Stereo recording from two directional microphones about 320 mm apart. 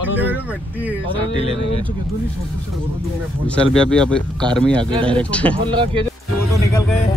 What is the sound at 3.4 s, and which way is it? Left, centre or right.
Speech, centre.